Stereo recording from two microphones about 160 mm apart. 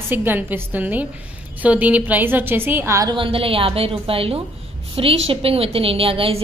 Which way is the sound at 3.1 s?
35° right (ahead or behind).